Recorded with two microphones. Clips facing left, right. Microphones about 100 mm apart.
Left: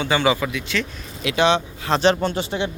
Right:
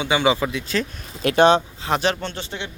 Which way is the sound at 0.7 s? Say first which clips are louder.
Right 1 dB; 40° right (ahead or behind).